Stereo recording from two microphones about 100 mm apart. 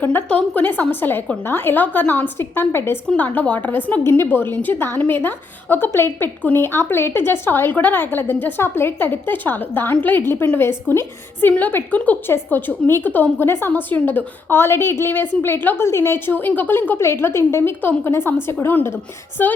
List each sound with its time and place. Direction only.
0.0 s a woman's voice: 15° left (ahead or behind)